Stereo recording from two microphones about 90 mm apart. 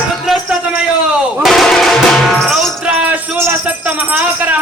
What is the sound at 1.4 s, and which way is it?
Music, centre (ahead or behind).